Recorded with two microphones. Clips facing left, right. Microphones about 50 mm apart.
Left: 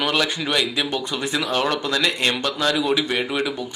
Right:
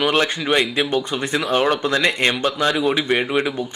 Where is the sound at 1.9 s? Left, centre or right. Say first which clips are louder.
Right 3 dB; right.